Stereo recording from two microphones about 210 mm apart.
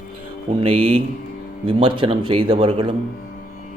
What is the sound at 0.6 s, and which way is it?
A man's voice, 25° right (ahead or behind).